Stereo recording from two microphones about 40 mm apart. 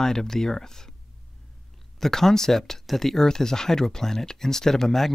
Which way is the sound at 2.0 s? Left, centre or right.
Centre.